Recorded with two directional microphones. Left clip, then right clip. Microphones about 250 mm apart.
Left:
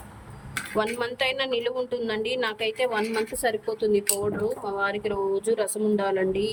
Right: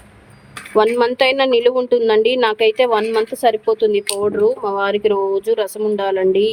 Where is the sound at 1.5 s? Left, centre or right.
Centre.